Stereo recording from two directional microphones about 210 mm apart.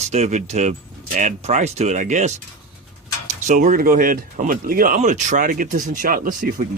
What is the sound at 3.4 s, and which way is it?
Speech, 35° right (ahead or behind).